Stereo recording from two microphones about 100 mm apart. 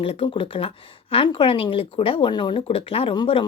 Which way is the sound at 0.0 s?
65° left (ahead or behind).